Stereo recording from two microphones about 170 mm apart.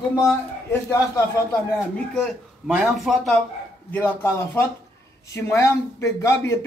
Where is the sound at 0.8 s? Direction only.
20° left (ahead or behind).